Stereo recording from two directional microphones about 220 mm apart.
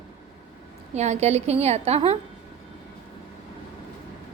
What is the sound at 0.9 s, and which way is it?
A woman's voice, 30° right (ahead or behind).